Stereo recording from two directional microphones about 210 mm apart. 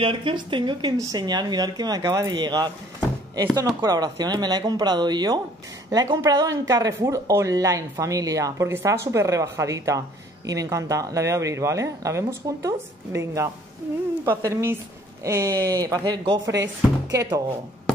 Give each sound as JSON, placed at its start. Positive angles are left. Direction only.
{"t": 0.0, "sound": "speech", "side_deg": -25}